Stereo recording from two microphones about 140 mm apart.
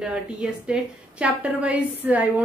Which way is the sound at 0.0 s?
5° right (ahead or behind).